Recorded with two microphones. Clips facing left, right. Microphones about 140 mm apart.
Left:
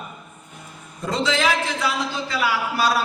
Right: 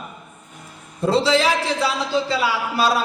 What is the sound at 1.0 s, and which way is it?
A man's voice, 30° right (ahead or behind).